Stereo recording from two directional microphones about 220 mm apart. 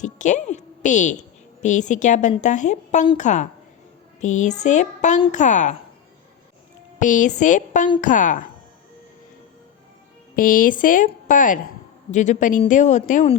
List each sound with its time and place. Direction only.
0.0 s music: 35° left (ahead or behind)
1.6 s a woman's voice: 35° left (ahead or behind)
7.0 s a woman's voice: 35° left (ahead or behind)
10.3 s a woman's voice: 40° left (ahead or behind)